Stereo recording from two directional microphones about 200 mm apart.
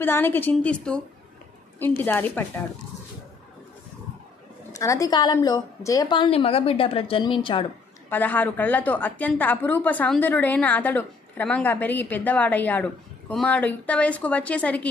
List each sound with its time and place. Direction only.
0.0 s a woman's voice: 10° left (ahead or behind)
4.7 s a woman's voice: 15° left (ahead or behind)
8.1 s a woman's voice: 10° left (ahead or behind)